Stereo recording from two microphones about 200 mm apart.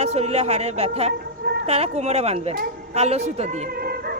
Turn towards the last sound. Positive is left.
turn(degrees=-30)  # may be behind; listen again after turning